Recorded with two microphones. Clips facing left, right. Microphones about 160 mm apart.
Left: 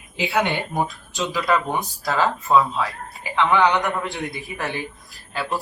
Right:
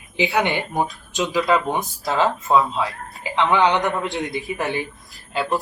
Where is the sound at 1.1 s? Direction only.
20° right (ahead or behind).